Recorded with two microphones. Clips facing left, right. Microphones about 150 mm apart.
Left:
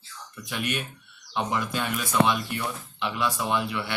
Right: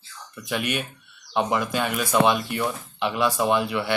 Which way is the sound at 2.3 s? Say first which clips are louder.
Right 4 dB; 40° right (ahead or behind).